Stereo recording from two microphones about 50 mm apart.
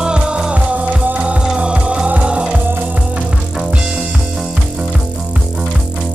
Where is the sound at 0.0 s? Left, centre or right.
Right.